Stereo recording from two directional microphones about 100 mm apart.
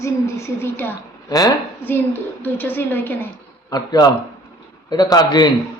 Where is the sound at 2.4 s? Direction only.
20° left (ahead or behind).